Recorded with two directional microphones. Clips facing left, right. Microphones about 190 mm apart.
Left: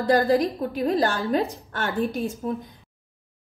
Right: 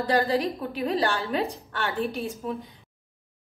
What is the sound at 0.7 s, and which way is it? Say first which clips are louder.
A woman's voice: left 2 dB; 45° left (ahead or behind).